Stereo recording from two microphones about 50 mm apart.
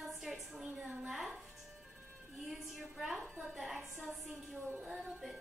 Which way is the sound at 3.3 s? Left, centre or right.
Centre.